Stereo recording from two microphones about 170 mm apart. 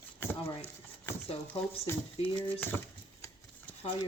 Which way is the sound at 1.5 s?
10° left (ahead or behind).